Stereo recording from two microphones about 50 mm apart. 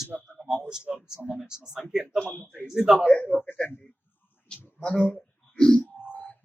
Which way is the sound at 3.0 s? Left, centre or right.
Left.